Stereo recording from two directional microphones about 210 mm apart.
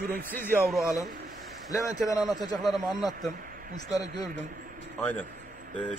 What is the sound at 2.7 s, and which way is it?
Speech, centre (ahead or behind).